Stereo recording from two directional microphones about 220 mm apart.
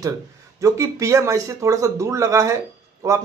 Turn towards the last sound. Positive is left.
turn(degrees=-15)  # may be behind; listen again after turning